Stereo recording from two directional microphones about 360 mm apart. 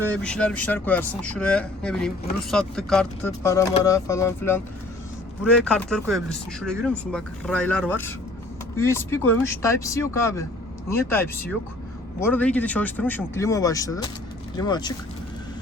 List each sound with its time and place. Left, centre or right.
0.0 s speech: centre